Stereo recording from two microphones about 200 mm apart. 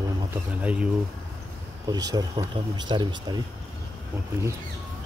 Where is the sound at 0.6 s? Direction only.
5° right (ahead or behind).